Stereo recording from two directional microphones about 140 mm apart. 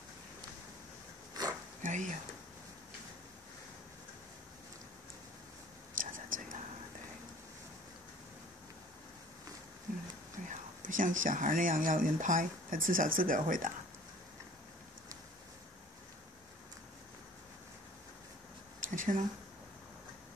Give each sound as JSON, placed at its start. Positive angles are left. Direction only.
{"t": 1.4, "sound": "sniff", "side_deg": -30}
{"t": 1.8, "sound": "speech", "side_deg": -60}
{"t": 5.9, "sound": "whispering", "side_deg": -70}
{"t": 10.5, "sound": "speech", "side_deg": -70}
{"t": 18.8, "sound": "a sound", "side_deg": -70}